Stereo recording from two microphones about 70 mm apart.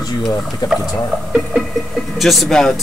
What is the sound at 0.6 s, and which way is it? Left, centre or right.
Speech, left.